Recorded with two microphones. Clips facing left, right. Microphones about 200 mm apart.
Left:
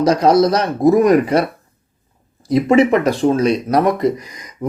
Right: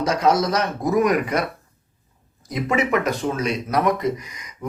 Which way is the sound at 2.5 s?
30° left (ahead or behind).